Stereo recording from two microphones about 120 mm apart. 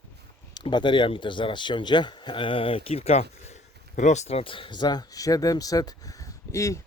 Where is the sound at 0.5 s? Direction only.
40° left (ahead or behind); by 3.2 s 60° left (ahead or behind).